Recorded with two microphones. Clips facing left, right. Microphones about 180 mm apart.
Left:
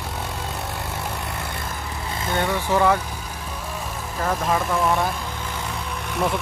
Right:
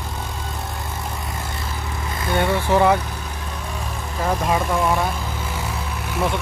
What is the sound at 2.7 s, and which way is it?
Speech, 20° right (ahead or behind).